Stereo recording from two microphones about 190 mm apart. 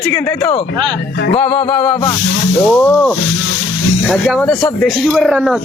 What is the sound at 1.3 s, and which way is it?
Music, 30° left (ahead or behind).